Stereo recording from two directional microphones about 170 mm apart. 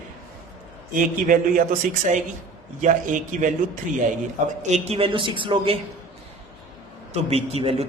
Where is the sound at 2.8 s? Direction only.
50° right (ahead or behind); by 5.8 s 30° right (ahead or behind).